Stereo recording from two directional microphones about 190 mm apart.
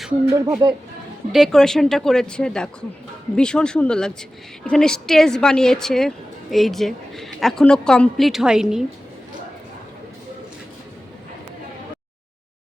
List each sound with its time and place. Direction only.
0.3 s speech: 15° right (ahead or behind)
1.3 s a woman's voice: centre (ahead or behind)